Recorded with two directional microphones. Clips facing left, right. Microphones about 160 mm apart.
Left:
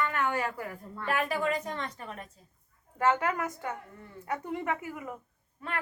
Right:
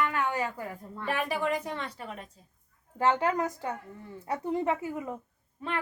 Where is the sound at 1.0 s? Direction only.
15° right (ahead or behind).